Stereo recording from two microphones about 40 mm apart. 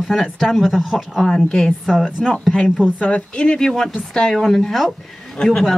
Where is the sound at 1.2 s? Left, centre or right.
Centre.